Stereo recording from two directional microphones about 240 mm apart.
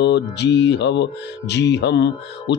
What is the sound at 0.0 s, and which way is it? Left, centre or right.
Mantra, left.